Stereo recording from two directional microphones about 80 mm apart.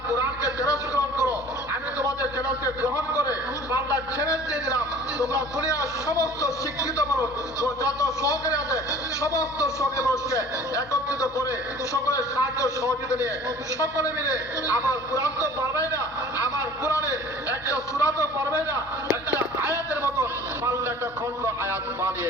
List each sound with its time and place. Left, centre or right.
0.4 s a sound: left
3.8 s a sound: left
5.2 s a man's voice: left
7.6 s a man's voice: left
12.0 s a man's voice: left
16.4 s a sound: left
17.7 s a man's voice: left
19.3 s music: right
21.6 s speech: right